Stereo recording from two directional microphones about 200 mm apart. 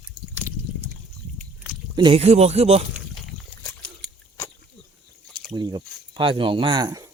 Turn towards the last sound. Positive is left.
turn(degrees=-20)  # may be behind; listen again after turning